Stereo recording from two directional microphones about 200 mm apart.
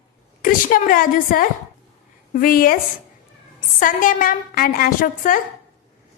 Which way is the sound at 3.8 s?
40° left (ahead or behind).